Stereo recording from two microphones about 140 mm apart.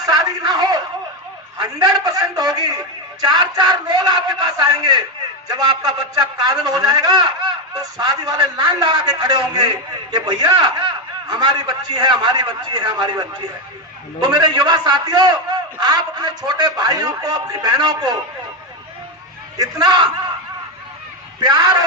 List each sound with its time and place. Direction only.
0.0 s a sound: 25° right (ahead or behind)
3.2 s a man's voice: 30° right (ahead or behind)
19.5 s a man's voice: 30° right (ahead or behind)
21.4 s a man's voice: 30° right (ahead or behind)